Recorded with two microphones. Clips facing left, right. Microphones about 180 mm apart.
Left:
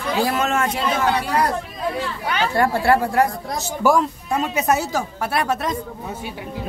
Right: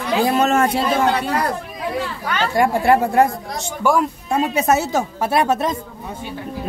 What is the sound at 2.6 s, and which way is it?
Speech, 15° right (ahead or behind).